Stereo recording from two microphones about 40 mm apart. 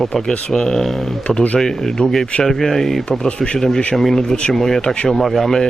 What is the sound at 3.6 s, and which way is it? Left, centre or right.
Speech, centre.